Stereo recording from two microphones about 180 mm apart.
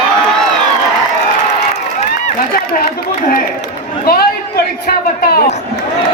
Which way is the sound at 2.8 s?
50° left (ahead or behind).